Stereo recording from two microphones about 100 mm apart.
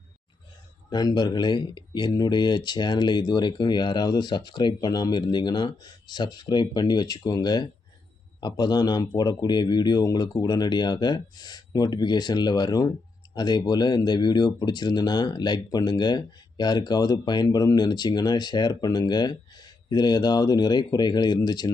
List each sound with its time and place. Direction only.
0.9 s speech: 45° left (ahead or behind)